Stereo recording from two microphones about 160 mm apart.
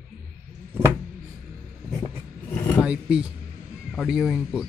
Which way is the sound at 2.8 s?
5° right (ahead or behind).